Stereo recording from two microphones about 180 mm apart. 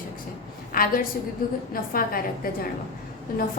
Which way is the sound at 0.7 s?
50° left (ahead or behind).